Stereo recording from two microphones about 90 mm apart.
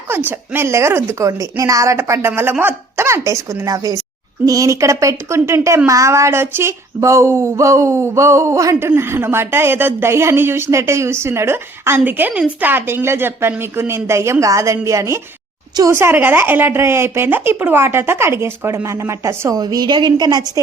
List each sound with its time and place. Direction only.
0.3 s a woman's voice: 25° right (ahead or behind)
19.5 s a woman's voice: 50° right (ahead or behind)